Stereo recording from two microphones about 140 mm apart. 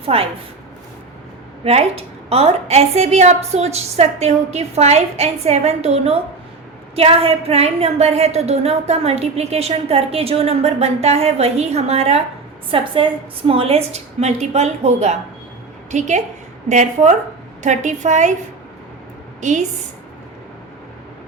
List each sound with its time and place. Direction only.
0.1 s a woman's voice: 45° right (ahead or behind)
1.6 s a woman's voice: 45° right (ahead or behind)
12.7 s a woman's voice: 40° right (ahead or behind); by 18.3 s 60° right (ahead or behind)
19.4 s a woman's voice: 60° right (ahead or behind)